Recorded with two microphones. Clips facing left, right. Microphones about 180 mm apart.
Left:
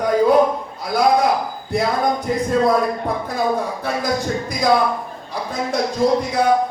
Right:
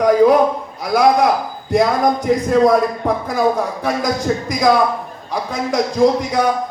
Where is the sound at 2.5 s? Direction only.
70° right (ahead or behind).